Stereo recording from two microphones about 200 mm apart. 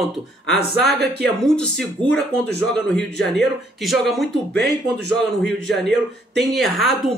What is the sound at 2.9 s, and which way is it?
Speech, 60° right (ahead or behind).